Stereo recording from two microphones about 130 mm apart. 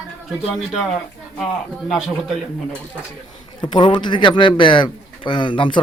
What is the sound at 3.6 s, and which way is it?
Speech, 35° left (ahead or behind).